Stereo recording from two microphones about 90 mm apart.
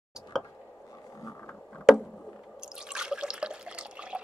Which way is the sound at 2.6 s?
10° right (ahead or behind).